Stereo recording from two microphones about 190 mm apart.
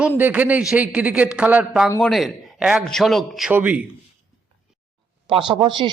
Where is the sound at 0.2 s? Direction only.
10° right (ahead or behind).